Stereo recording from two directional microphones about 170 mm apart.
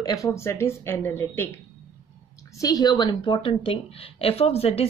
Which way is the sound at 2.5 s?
20° left (ahead or behind).